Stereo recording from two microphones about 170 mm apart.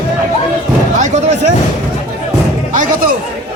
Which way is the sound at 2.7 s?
50° right (ahead or behind).